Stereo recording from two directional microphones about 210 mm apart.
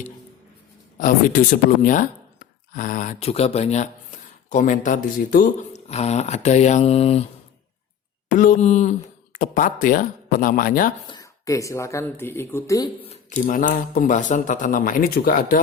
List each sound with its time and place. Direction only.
0.9 s speech: 40° left (ahead or behind)
8.3 s speech: 40° left (ahead or behind)
11.1 s speech: 15° left (ahead or behind)
13.1 s speech: 35° left (ahead or behind)